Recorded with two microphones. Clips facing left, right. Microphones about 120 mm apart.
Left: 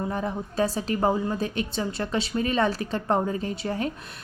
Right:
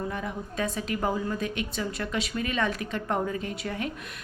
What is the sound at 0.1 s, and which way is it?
A woman's voice, 35° left (ahead or behind).